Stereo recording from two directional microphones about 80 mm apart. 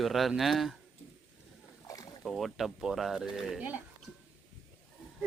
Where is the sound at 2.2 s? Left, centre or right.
Centre.